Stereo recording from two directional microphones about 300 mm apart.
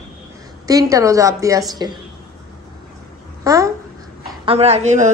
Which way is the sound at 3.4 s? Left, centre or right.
Centre.